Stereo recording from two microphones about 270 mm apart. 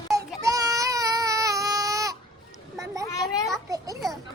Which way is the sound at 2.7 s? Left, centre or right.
Centre.